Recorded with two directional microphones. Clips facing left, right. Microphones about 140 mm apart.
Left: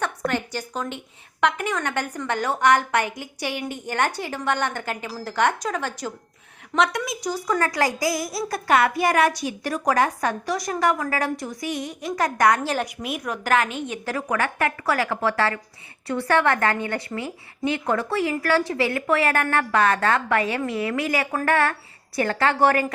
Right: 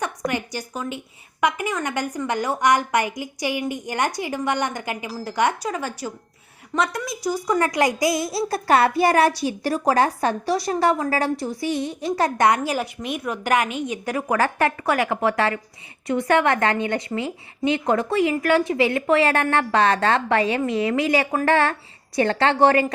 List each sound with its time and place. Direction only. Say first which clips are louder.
0.0 s a woman's voice: even; 10° right (ahead or behind)
7.3 s a woman's voice: right 3 dB; 15° right (ahead or behind)
12.5 s a woman's voice: right 1 dB; 10° right (ahead or behind)
13.0 s a woman's voice: right 2 dB; 5° left (ahead or behind)
14.3 s a woman's voice: right 4 dB; 30° right (ahead or behind)
14.8 s a woman's voice: right 2 dB; 20° right (ahead or behind)